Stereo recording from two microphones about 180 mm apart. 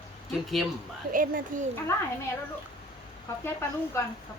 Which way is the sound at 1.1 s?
50° right (ahead or behind).